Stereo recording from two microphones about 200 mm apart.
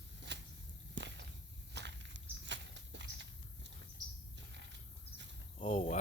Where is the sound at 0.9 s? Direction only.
60° right (ahead or behind).